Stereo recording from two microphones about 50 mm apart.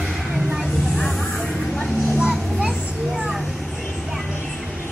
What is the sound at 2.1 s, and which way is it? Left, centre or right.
Children playing, centre.